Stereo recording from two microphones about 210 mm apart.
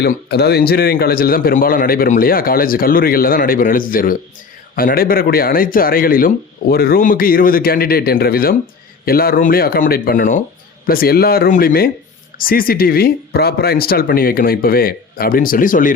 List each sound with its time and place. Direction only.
0.0 s speech: 50° left (ahead or behind)